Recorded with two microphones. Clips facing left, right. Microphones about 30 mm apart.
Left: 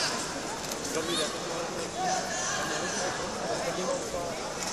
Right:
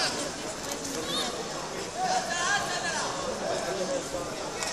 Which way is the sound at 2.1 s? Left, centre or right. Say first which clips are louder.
Right 5 dB; right.